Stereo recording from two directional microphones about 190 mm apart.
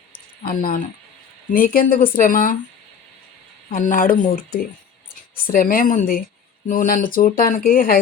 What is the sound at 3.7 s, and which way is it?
Speech, 45° left (ahead or behind).